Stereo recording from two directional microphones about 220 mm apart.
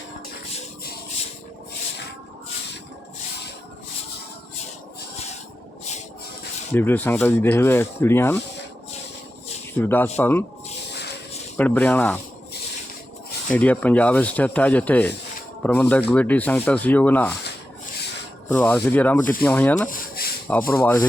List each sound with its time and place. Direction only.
6.7 s speech: 10° left (ahead or behind)
9.7 s speech: 10° left (ahead or behind)
11.5 s speech: 5° left (ahead or behind)
13.5 s speech: 5° left (ahead or behind)
18.4 s speech: 5° left (ahead or behind)
19.9 s a sound: 45° left (ahead or behind)
20.5 s speech: 10° left (ahead or behind)